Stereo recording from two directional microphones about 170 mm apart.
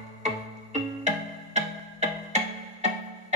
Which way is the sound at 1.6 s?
40° right (ahead or behind).